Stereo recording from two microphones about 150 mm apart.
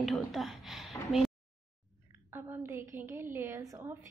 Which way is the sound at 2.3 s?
15° right (ahead or behind).